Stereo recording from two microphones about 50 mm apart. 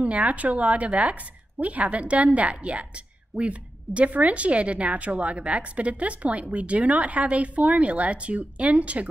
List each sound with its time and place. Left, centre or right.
0.0 s a woman's voice: right